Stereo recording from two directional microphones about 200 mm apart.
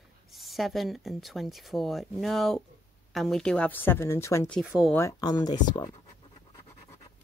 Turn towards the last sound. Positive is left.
turn(degrees=20)  # may be behind; listen again after turning